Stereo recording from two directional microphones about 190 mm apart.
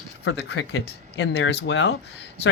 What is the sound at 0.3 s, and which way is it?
Speech, 65° left (ahead or behind).